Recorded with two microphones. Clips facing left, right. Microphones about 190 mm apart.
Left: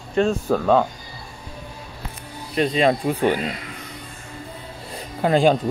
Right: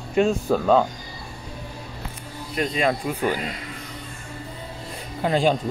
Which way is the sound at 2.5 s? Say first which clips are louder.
Left 4 dB; 30° left (ahead or behind).